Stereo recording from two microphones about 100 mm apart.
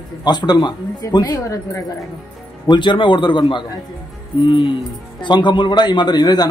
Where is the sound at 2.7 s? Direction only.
55° left (ahead or behind).